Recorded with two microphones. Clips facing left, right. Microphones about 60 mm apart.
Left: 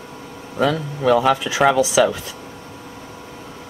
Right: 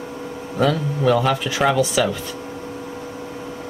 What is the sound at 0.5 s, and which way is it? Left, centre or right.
Speech, centre.